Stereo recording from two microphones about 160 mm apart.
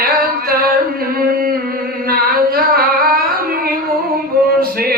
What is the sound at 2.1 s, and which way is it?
Singing, 70° right (ahead or behind).